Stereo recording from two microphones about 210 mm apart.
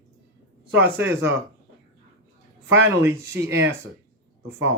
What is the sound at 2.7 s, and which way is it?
Speech, 65° right (ahead or behind).